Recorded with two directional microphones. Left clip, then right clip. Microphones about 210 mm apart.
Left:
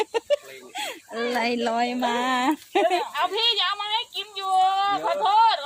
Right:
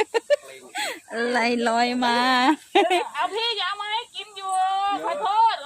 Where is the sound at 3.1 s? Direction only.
55° left (ahead or behind).